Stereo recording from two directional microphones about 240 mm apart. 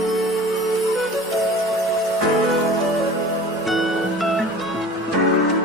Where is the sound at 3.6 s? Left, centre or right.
Centre.